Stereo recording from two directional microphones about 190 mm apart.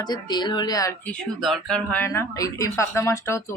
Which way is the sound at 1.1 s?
Centre (ahead or behind).